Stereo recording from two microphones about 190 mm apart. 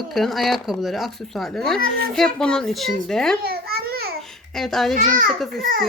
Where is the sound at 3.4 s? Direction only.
55° right (ahead or behind).